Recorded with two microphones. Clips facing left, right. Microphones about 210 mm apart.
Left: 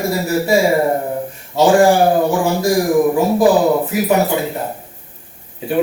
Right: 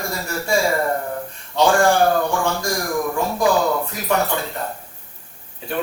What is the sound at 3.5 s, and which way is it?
Speech, 20° left (ahead or behind).